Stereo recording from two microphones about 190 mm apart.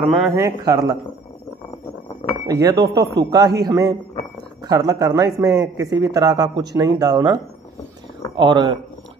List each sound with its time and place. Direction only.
0.0 s speech: centre (ahead or behind)
0.3 s a man's voice: 20° right (ahead or behind)
2.4 s a man's voice: 20° right (ahead or behind)